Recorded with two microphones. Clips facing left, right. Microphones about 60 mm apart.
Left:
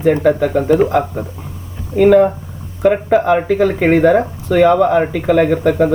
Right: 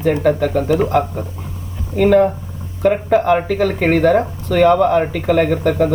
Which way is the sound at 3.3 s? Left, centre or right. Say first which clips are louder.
Left 2 dB; centre.